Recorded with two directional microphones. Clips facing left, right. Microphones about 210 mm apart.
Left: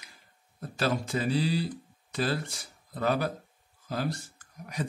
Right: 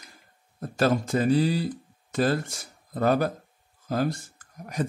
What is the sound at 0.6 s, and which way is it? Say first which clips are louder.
Speech: right 6 dB; 45° right (ahead or behind).